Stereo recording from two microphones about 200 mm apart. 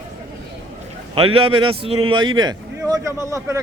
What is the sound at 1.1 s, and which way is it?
A man's voice, 25° right (ahead or behind).